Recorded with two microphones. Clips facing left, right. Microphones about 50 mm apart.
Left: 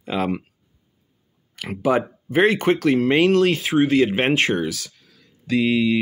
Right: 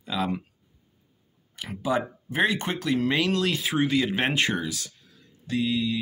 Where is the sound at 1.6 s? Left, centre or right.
Left.